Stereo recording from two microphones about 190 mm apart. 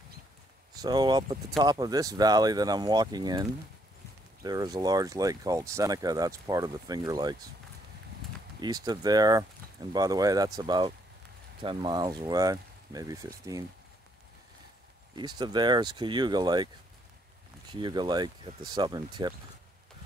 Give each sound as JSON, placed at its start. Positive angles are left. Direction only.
{"t": 0.7, "sound": "speech", "side_deg": -20}
{"t": 8.5, "sound": "speech", "side_deg": -20}
{"t": 15.1, "sound": "speech", "side_deg": -25}
{"t": 17.6, "sound": "speech", "side_deg": -25}